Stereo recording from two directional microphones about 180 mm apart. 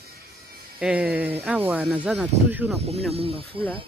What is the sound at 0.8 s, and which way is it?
Speech, 5° right (ahead or behind).